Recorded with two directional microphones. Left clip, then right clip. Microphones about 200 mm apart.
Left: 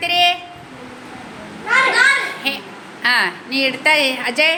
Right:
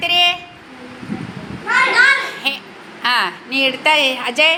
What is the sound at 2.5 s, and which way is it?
A woman's voice, 10° left (ahead or behind).